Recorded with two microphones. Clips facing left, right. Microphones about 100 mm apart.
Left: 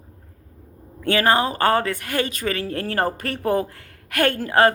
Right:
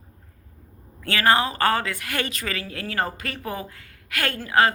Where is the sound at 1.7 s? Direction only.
45° left (ahead or behind).